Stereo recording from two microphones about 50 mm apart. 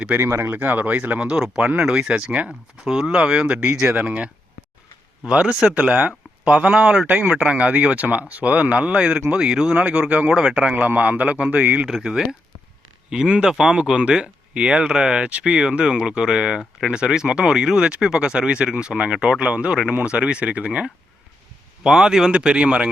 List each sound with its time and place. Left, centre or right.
0.3 s speech: right
0.6 s speech: right
1.2 s speech: centre
5.8 s speech: right
10.8 s speech: right
13.1 s speech: centre
21.8 s speech: centre